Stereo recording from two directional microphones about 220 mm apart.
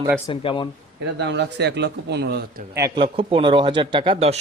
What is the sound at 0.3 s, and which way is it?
Speech, 20° left (ahead or behind).